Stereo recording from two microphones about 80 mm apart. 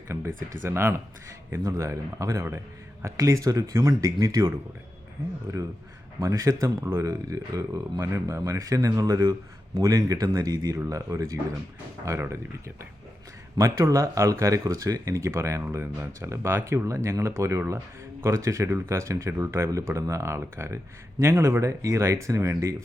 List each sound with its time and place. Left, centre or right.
0.1 s a man's voice: right
5.5 s a man's voice: right
13.8 s a man's voice: right